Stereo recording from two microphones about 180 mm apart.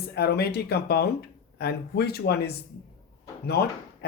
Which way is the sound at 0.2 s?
60° left (ahead or behind).